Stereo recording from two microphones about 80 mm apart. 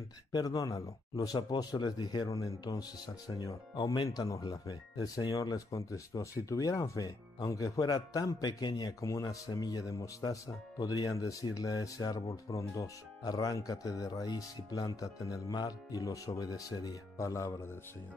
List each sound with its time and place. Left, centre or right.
0.3 s speech: left
2.2 s speech: left
4.2 s speech: left
9.0 s speech: left
9.5 s speech: left